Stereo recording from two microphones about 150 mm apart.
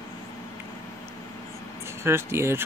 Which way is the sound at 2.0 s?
15° right (ahead or behind).